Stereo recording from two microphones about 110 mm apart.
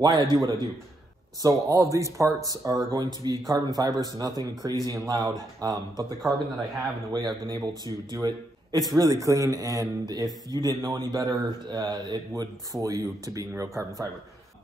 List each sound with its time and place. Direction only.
0.0 s a man's voice: 40° right (ahead or behind)
1.4 s speech: 30° right (ahead or behind)